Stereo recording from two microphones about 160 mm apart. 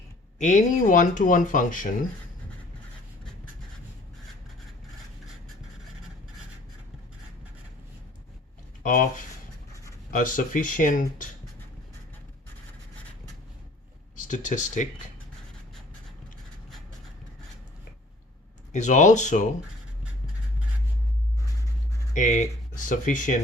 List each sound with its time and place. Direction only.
0.3 s speech: 50° left (ahead or behind)
8.8 s speech: 55° left (ahead or behind)
14.2 s speech: 50° left (ahead or behind)
18.7 s speech: 50° left (ahead or behind)
22.1 s speech: 50° left (ahead or behind)